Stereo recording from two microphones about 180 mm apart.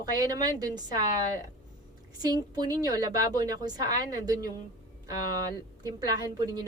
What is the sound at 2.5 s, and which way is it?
A woman's voice, 20° right (ahead or behind).